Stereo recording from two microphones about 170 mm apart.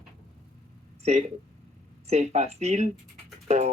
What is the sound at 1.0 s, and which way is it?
Speech, 40° right (ahead or behind).